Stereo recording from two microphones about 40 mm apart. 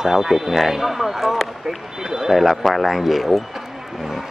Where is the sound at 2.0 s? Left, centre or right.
Centre.